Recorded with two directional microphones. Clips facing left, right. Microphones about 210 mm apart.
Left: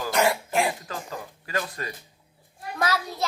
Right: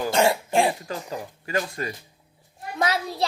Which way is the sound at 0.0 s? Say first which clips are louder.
Right 3 dB; 25° right (ahead or behind).